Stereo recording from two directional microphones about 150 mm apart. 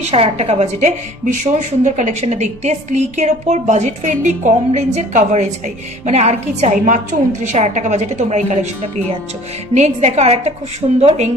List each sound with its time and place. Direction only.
0.0 s a woman's voice: 45° right (ahead or behind)
9.8 s a woman's voice: 50° right (ahead or behind)